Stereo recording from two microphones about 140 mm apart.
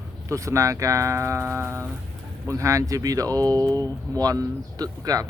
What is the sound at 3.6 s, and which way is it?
Speech, 15° left (ahead or behind).